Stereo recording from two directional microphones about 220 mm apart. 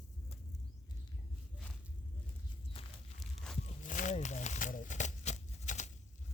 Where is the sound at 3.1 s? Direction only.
Centre (ahead or behind).